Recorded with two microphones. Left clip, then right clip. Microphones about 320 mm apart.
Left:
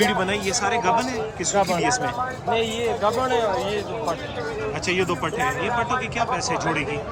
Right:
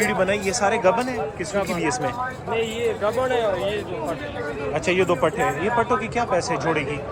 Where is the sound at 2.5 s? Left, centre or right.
Left.